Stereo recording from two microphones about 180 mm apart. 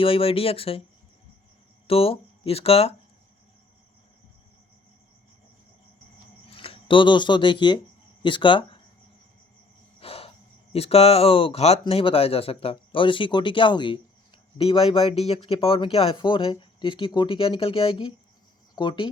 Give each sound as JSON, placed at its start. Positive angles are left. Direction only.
{"t": 0.0, "sound": "speech", "side_deg": 30}
{"t": 1.9, "sound": "speech", "side_deg": 30}
{"t": 6.5, "sound": "speech", "side_deg": 30}
{"t": 10.0, "sound": "gasp", "side_deg": 30}
{"t": 11.8, "sound": "speech", "side_deg": 30}